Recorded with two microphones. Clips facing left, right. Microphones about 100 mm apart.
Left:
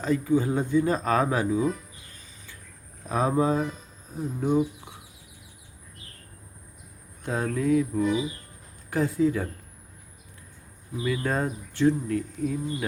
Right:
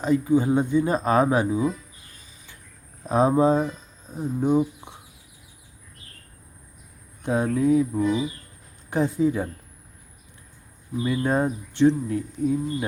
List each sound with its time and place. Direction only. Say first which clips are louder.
0.0 s speech: right 3 dB; 20° right (ahead or behind)
3.1 s speech: right 5 dB; 25° right (ahead or behind)
7.3 s speech: right 4 dB; 20° right (ahead or behind)
11.0 s speech: right 4 dB; 20° right (ahead or behind)